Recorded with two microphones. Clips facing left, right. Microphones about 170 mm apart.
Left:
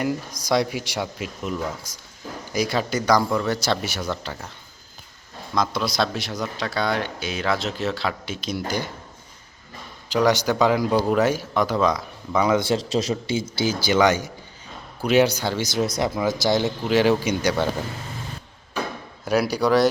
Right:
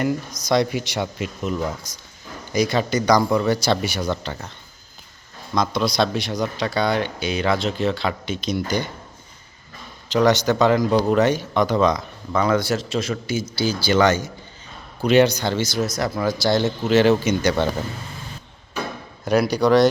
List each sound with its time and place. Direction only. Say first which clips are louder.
0.4 s speech: right 2 dB; 5° left (ahead or behind)
5.5 s speech: right 3 dB; 5° left (ahead or behind)
10.1 s speech: right 2 dB; 10° left (ahead or behind)
12.5 s speech: even; 20° left (ahead or behind)
13.8 s speech: right 1 dB; 10° left (ahead or behind)
19.2 s speech: right 3 dB; 5° left (ahead or behind)